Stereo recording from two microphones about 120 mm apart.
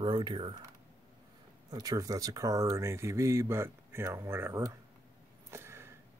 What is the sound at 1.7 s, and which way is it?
Speech, 30° right (ahead or behind).